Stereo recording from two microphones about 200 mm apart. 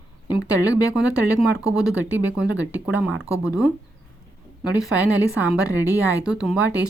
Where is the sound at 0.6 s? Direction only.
15° left (ahead or behind).